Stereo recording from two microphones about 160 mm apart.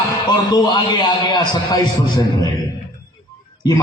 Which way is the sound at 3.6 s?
25° left (ahead or behind).